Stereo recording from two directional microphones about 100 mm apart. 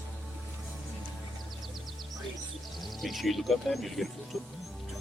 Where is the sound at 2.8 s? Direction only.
Centre (ahead or behind).